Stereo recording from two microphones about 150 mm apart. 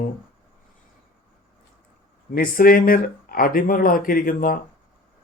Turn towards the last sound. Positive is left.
turn(degrees=70)  # may be behind; listen again after turning